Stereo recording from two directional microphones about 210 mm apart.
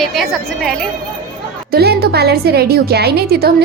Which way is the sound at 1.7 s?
50° right (ahead or behind).